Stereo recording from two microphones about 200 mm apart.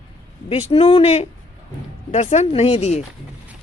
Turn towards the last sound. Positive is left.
turn(degrees=35)  # may be behind; listen again after turning